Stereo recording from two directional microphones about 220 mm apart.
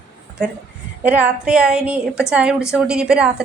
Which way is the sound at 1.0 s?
5° right (ahead or behind).